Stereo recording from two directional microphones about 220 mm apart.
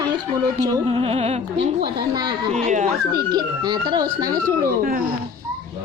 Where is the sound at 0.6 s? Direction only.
20° right (ahead or behind).